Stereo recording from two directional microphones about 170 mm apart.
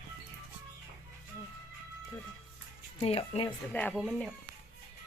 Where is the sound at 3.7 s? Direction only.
5° left (ahead or behind).